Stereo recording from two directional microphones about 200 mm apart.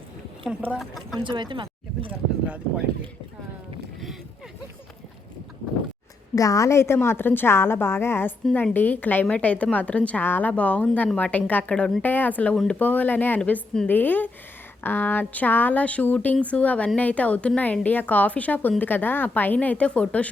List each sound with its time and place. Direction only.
0.7 s speech: centre (ahead or behind)
1.2 s speech: 25° right (ahead or behind)
6.3 s a woman's voice: 15° left (ahead or behind)